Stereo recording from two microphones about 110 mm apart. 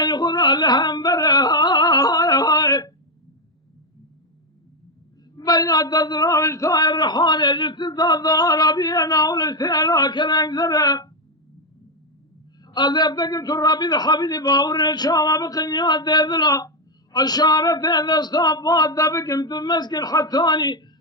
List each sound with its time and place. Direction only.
0.0 s music: 40° left (ahead or behind)
5.4 s a man's voice: 35° left (ahead or behind)
12.6 s a man's voice: 40° left (ahead or behind)